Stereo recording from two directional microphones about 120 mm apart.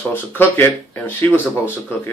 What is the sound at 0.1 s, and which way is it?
Speech, 15° left (ahead or behind).